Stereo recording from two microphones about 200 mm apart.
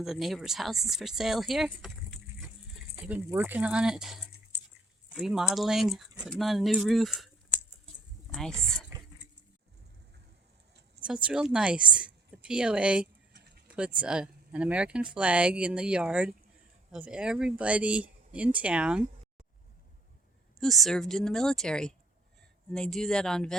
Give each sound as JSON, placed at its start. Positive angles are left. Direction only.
{"t": 0.0, "sound": "speech", "side_deg": 0}
{"t": 8.3, "sound": "speech", "side_deg": 0}
{"t": 11.0, "sound": "a woman's voice", "side_deg": -5}
{"t": 13.3, "sound": "a sound", "side_deg": -55}
{"t": 13.7, "sound": "speech", "side_deg": -5}
{"t": 20.6, "sound": "speech", "side_deg": 0}